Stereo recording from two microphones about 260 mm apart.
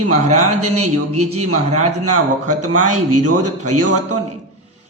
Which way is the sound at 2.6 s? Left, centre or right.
Right.